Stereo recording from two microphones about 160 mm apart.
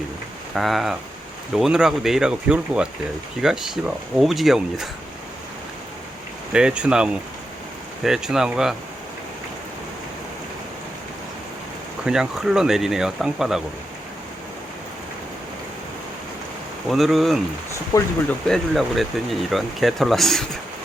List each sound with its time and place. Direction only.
0.5 s speech: centre (ahead or behind)
6.5 s speech: 5° right (ahead or behind)
12.0 s speech: 5° right (ahead or behind)
16.9 s speech: centre (ahead or behind)
17.9 s speech: 20° left (ahead or behind)
18.4 s speech: centre (ahead or behind)